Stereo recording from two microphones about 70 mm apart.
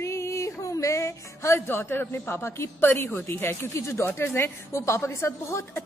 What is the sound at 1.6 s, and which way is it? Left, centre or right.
A woman's voice, left.